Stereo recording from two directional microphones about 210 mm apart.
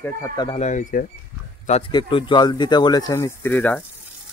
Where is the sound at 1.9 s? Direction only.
20° left (ahead or behind).